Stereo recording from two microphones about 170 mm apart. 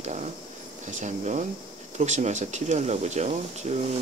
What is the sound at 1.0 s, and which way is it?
Speech, 45° right (ahead or behind).